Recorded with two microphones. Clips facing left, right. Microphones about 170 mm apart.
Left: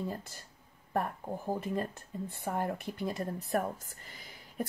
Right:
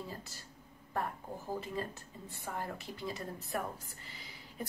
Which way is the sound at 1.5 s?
50° left (ahead or behind).